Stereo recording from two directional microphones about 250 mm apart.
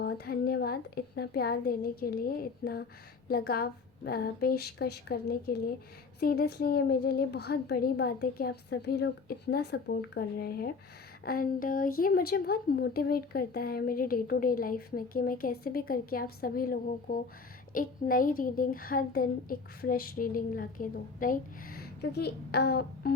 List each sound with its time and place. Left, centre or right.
0.0 s a woman's voice: left